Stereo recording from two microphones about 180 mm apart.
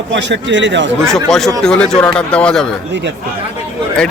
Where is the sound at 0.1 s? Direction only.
85° right.